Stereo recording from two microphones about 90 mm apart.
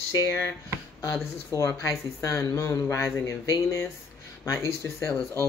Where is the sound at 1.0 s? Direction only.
35° left (ahead or behind).